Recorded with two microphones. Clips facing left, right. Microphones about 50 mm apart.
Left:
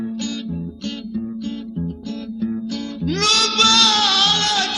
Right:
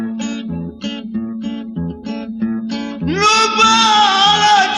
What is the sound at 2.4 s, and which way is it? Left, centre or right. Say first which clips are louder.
Music: right 4 dB; right.